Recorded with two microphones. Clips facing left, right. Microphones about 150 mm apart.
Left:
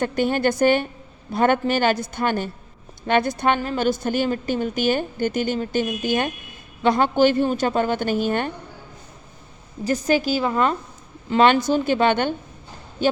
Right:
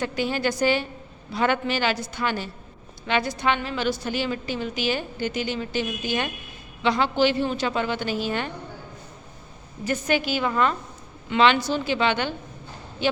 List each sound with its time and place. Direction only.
0.0 s a woman's voice: 50° left (ahead or behind)
9.8 s a woman's voice: 35° left (ahead or behind)